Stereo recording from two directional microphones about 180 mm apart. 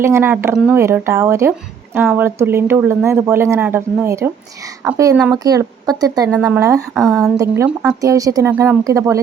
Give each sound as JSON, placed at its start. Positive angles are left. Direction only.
{"t": 0.0, "sound": "speech", "side_deg": -15}
{"t": 0.5, "sound": "speech", "side_deg": 0}
{"t": 0.8, "sound": "speech", "side_deg": -15}